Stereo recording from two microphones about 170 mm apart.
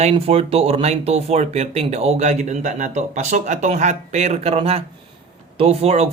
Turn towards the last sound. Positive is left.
turn(degrees=-35)  # may be behind; listen again after turning